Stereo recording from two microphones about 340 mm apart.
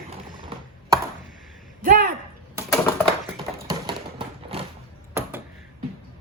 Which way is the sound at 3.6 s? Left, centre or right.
Centre.